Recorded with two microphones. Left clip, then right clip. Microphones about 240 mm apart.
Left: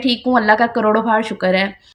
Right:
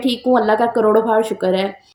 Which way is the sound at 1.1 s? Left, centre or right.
Left.